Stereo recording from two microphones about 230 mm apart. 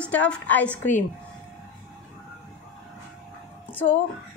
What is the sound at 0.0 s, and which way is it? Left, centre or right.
A woman's voice, centre.